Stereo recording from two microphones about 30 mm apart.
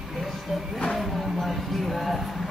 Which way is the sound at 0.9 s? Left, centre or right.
Centre.